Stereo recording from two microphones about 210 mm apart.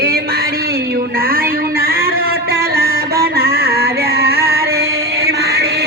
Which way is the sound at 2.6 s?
45° right (ahead or behind).